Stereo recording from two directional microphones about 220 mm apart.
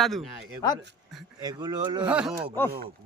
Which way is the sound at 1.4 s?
20° right (ahead or behind).